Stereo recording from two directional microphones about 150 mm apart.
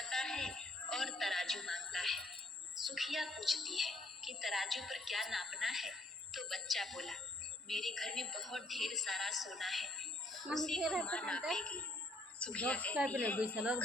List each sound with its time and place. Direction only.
0.0 s music: centre (ahead or behind)
2.7 s a woman's voice: centre (ahead or behind)